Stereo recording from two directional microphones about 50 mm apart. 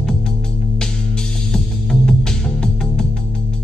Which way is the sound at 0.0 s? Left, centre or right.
Centre.